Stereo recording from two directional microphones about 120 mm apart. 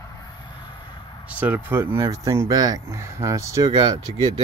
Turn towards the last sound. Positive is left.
turn(degrees=-40)  # may be behind; listen again after turning